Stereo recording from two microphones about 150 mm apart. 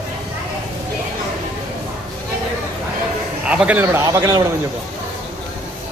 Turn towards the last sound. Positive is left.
turn(degrees=-20)  # may be behind; listen again after turning